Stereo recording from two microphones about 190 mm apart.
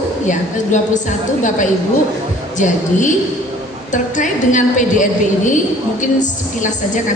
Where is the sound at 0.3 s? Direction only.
40° left (ahead or behind).